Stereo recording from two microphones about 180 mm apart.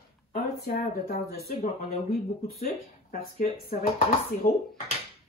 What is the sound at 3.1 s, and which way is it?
Speech, 55° left (ahead or behind).